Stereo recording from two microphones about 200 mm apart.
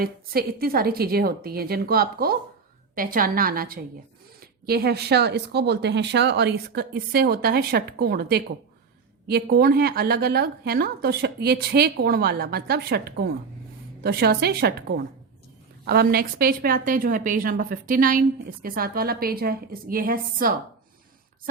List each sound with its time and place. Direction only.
0.0 s speech: 50° right (ahead or behind)